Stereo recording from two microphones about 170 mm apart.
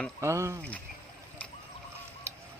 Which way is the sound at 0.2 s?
15° right (ahead or behind).